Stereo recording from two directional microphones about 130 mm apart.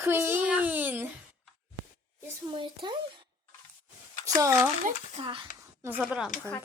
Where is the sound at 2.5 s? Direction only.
40° right (ahead or behind).